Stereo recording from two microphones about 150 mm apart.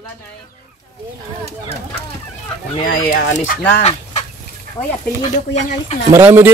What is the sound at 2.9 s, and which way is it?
Speech, 65° left (ahead or behind).